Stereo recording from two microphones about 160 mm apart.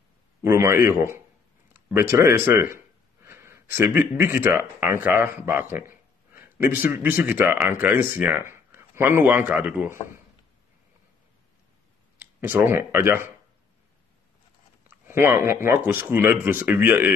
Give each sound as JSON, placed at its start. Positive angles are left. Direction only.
{"t": 0.4, "sound": "speech", "side_deg": -15}
{"t": 12.2, "sound": "speech", "side_deg": -10}
{"t": 14.9, "sound": "speech", "side_deg": -15}